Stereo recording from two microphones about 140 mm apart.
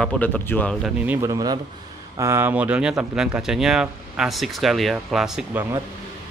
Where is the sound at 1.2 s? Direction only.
25° right (ahead or behind); by 5.4 s 5° right (ahead or behind).